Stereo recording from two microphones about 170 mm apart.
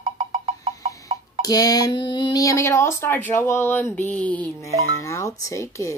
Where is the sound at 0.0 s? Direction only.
35° right (ahead or behind).